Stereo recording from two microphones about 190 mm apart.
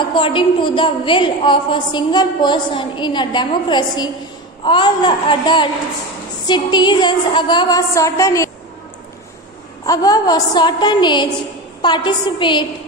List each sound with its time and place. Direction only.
0.1 s a woman's voice: 25° left (ahead or behind)
9.8 s a woman's voice: 20° left (ahead or behind)